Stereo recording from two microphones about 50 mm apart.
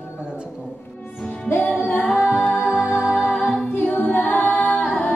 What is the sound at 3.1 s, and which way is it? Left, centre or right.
A capella, centre.